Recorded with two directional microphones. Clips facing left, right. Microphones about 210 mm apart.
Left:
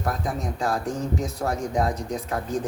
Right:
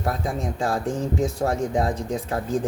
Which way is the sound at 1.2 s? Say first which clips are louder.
Right 4 dB; 30° right (ahead or behind).